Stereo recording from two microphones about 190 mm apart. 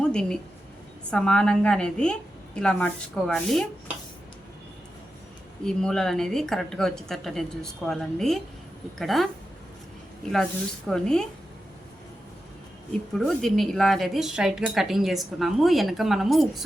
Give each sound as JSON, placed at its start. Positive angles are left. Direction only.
{"t": 0.0, "sound": "speech", "side_deg": 5}
{"t": 5.6, "sound": "speech", "side_deg": 5}
{"t": 10.8, "sound": "speech", "side_deg": 5}
{"t": 13.1, "sound": "speech", "side_deg": 0}